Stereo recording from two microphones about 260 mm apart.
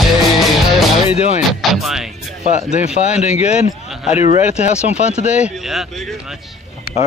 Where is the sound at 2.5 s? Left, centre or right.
Left.